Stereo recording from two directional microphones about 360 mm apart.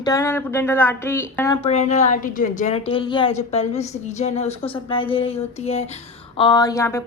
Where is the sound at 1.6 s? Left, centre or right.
Centre.